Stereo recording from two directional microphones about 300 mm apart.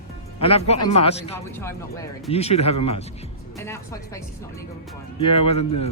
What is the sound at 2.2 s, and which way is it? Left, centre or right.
Speech, left.